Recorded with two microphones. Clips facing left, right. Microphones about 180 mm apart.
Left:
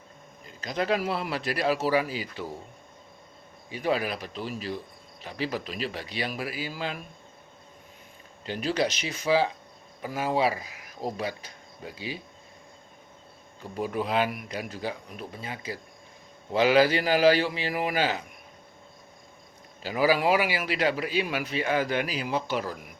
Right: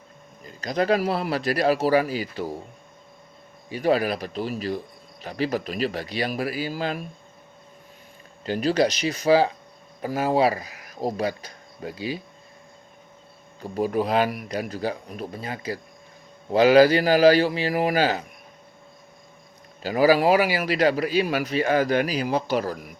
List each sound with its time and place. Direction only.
0.6 s speech: 40° right (ahead or behind)
3.7 s speech: 40° right (ahead or behind)
8.4 s speech: 40° right (ahead or behind)
13.6 s speech: 40° right (ahead or behind)
19.8 s speech: 40° right (ahead or behind)